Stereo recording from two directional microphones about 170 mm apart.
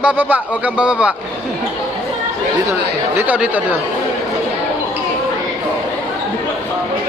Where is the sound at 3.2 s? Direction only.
10° right (ahead or behind).